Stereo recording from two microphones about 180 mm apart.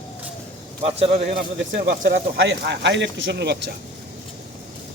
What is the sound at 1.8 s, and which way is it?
Speech, 55° right (ahead or behind).